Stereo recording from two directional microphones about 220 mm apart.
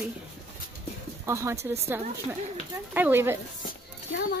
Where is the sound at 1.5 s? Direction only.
30° right (ahead or behind).